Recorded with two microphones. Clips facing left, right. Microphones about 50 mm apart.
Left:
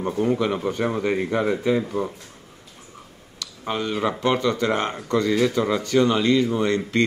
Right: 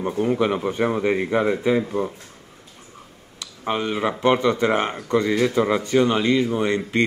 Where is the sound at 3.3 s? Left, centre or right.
Right.